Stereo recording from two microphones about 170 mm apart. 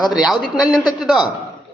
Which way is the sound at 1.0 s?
Centre (ahead or behind).